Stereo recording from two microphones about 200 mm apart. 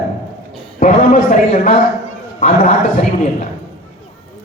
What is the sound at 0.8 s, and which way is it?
A man's voice, 45° left (ahead or behind).